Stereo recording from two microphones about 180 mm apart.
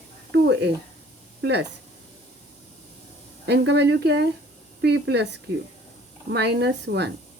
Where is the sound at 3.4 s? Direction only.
70° right (ahead or behind).